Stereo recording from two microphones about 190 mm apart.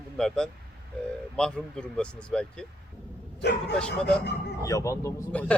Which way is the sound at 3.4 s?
65° left (ahead or behind).